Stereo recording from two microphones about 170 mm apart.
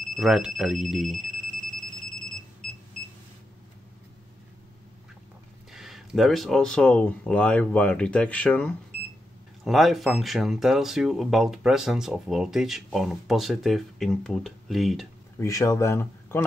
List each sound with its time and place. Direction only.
0.1 s speech: centre (ahead or behind)
5.7 s speech: centre (ahead or behind)
15.3 s speech: 20° left (ahead or behind)